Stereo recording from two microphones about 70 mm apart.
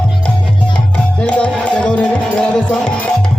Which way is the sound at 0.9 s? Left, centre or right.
Centre.